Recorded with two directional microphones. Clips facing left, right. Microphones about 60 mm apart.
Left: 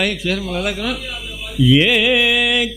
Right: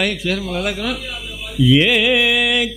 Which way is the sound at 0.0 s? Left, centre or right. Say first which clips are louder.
Even; left.